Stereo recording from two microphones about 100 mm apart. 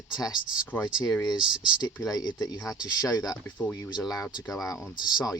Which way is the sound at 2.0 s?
40° left (ahead or behind).